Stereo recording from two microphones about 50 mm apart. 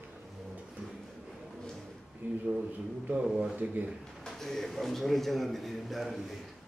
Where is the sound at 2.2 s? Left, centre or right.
Right.